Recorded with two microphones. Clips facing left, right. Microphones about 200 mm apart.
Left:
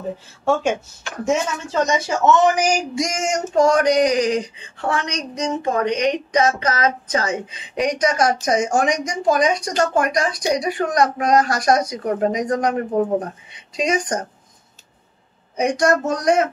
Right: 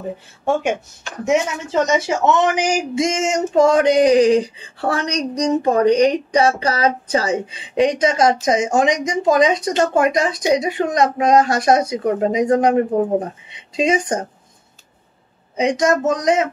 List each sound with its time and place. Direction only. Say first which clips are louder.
1.3 s speech: right 3 dB; 20° right (ahead or behind)
15.6 s speech: right 2 dB; 20° right (ahead or behind)